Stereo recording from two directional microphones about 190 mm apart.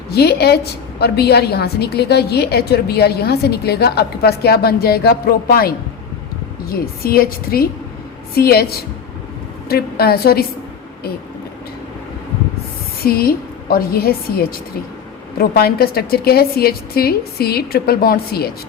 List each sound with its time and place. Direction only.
0.1 s a woman's voice: 60° left (ahead or behind)
13.1 s a woman's voice: 55° left (ahead or behind)